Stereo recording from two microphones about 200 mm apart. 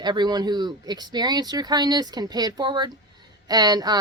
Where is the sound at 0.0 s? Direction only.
20° right (ahead or behind).